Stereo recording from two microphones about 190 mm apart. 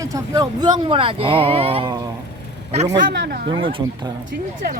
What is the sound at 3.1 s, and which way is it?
Speech, 60° right (ahead or behind).